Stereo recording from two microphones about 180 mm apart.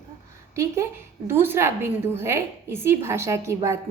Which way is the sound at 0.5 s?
15° right (ahead or behind).